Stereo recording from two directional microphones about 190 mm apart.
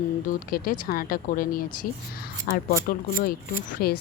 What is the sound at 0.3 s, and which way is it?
Speech, 50° left (ahead or behind).